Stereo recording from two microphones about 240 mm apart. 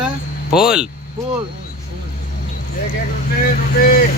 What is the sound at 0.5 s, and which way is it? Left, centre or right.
Speech, centre.